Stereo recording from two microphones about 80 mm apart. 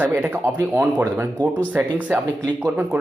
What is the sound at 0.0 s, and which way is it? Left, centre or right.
Speech, right.